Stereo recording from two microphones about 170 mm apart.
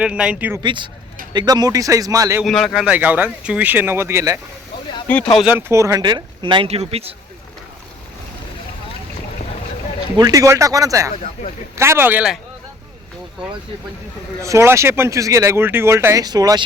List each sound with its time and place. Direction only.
0.0 s speech: 5° right (ahead or behind)
0.6 s speech: 25° right (ahead or behind)
2.4 s speech: centre (ahead or behind); by 4.4 s 15° right (ahead or behind)
5.0 s speech: 5° left (ahead or behind)
5.5 s speech: 15° right (ahead or behind); by 7.1 s 35° right (ahead or behind)
10.2 s speech: 20° right (ahead or behind)
11.1 s speech: 45° left (ahead or behind)
11.8 s speech: 15° right (ahead or behind)
14.4 s speech: 15° right (ahead or behind)